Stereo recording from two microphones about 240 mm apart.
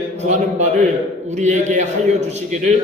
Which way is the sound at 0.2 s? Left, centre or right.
Right.